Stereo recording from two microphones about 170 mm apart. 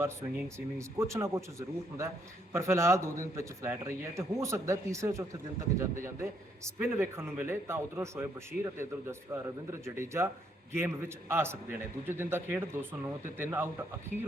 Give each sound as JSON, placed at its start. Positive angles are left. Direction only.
{"t": 0.0, "sound": "a man's voice", "side_deg": -15}